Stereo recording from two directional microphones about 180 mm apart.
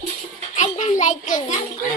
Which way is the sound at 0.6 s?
45° left (ahead or behind).